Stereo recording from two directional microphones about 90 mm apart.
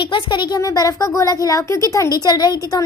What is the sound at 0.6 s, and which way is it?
A child's voice, 40° left (ahead or behind).